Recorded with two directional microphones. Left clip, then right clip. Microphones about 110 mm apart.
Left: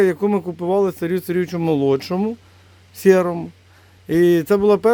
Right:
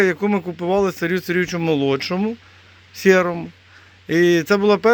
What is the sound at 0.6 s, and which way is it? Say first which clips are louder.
A man's voice: even; 25° left (ahead or behind).